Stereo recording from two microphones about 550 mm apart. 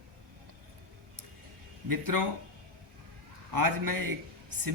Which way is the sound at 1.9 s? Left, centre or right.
Right.